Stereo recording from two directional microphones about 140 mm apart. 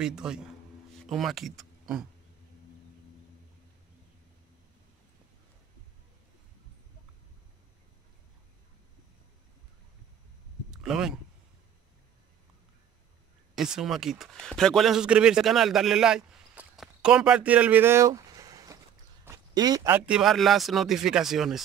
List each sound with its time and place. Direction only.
0.0 s speech: 5° right (ahead or behind)
10.7 s speech: 5° right (ahead or behind)
13.6 s a man's voice: 5° right (ahead or behind); by 18.8 s 25° right (ahead or behind)
19.2 s a sound: 25° right (ahead or behind)
19.9 s speech: 5° right (ahead or behind)